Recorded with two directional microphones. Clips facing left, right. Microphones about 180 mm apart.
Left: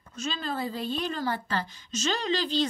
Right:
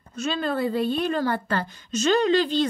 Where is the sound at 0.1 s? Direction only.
60° right (ahead or behind).